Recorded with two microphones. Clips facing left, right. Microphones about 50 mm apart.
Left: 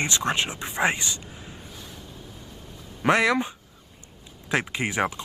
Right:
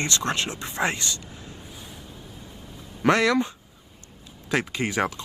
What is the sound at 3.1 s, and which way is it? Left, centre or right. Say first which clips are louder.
Speech: even; left.